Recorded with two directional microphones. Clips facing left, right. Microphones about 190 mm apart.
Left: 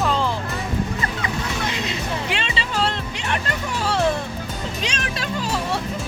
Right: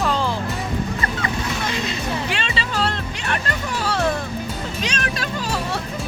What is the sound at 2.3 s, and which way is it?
Music, 20° left (ahead or behind).